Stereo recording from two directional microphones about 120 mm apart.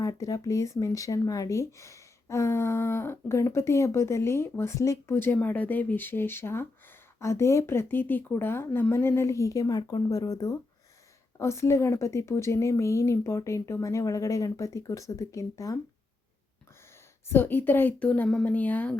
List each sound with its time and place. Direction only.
0.0 s speech: 30° left (ahead or behind)
17.2 s a woman's voice: 20° left (ahead or behind)